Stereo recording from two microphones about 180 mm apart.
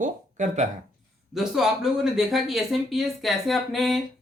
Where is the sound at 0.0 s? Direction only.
45° right (ahead or behind).